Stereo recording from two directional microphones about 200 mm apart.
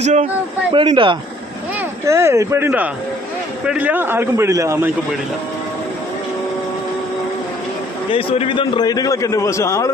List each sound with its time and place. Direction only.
0.0 s a man's voice: 35° right (ahead or behind)
2.0 s a man's voice: 15° right (ahead or behind)
8.1 s a man's voice: 25° left (ahead or behind)